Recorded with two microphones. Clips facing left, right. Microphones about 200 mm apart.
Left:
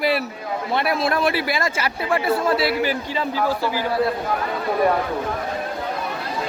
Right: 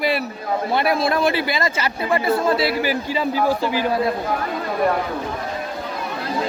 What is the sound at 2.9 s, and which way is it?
Speech, 15° right (ahead or behind).